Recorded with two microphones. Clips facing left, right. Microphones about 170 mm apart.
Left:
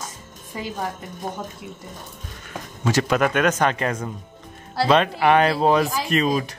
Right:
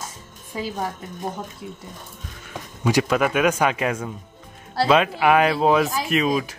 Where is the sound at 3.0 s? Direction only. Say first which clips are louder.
Left 3 dB; 5° right (ahead or behind).